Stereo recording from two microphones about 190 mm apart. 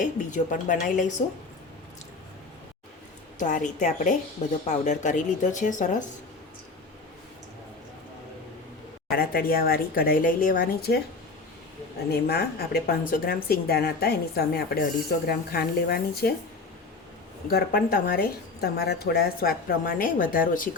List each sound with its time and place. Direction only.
0.0 s speech: 40° left (ahead or behind)
3.3 s speech: 40° left (ahead or behind)
9.1 s speech: 50° left (ahead or behind)
12.1 s a woman's voice: 60° left (ahead or behind)
17.5 s speech: 55° left (ahead or behind)